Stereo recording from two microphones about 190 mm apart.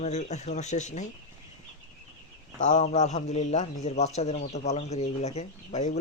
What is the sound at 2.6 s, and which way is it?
A man's voice, 35° left (ahead or behind).